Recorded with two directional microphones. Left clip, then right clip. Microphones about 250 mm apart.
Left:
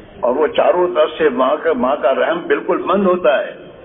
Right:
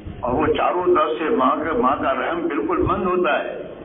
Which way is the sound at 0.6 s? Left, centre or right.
Left.